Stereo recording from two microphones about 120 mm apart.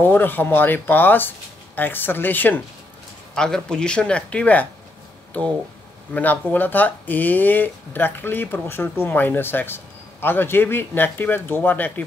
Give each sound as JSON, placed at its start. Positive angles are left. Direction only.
{"t": 0.0, "sound": "speech", "side_deg": 15}
{"t": 6.1, "sound": "speech", "side_deg": 15}